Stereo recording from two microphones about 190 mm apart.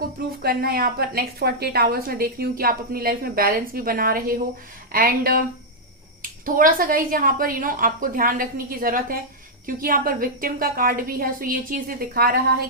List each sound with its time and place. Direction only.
0.4 s a woman's voice: 50° right (ahead or behind)